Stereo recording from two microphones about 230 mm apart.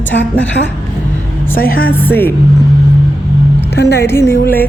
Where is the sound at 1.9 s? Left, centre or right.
Centre.